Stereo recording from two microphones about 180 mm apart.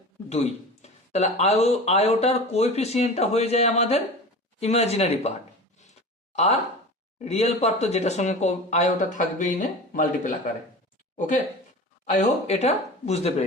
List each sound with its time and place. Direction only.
0.3 s speech: 35° left (ahead or behind)
6.3 s speech: 35° left (ahead or behind)
12.0 s speech: 40° left (ahead or behind)